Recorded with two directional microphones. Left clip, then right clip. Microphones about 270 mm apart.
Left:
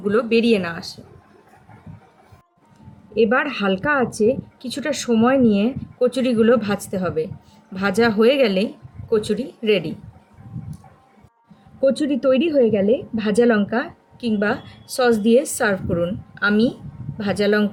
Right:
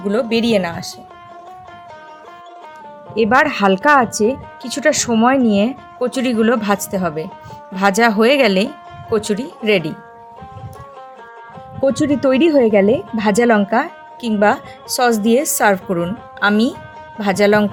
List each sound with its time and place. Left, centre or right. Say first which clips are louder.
0.0 s speech: right 1 dB; centre
3.2 s speech: right 5 dB; right
11.8 s speech: right 3 dB; right